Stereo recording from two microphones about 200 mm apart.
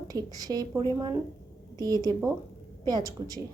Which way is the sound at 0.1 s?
20° right (ahead or behind).